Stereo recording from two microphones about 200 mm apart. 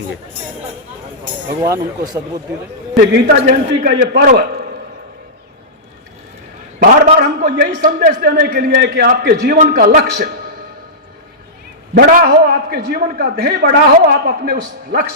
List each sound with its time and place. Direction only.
1.6 s speech: 15° right (ahead or behind)
2.9 s a man's voice: 50° right (ahead or behind)
6.7 s a man's voice: 50° right (ahead or behind)
11.9 s a man's voice: 45° right (ahead or behind)